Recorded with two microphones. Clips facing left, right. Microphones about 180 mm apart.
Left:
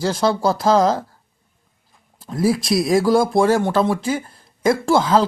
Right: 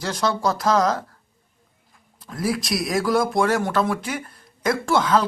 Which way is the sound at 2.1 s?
30° left (ahead or behind).